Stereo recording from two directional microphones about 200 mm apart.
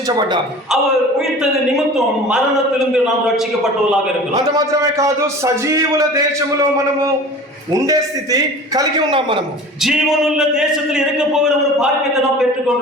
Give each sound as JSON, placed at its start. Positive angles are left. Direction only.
{"t": 2.3, "sound": "a man's voice", "side_deg": -5}
{"t": 4.5, "sound": "a man's voice", "side_deg": -15}
{"t": 7.7, "sound": "a man's voice", "side_deg": -15}
{"t": 9.8, "sound": "a man's voice", "side_deg": 0}